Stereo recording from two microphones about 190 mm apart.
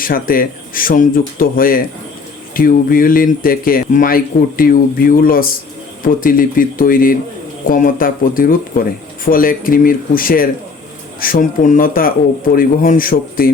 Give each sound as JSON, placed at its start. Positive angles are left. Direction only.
{"t": 0.0, "sound": "speech", "side_deg": 50}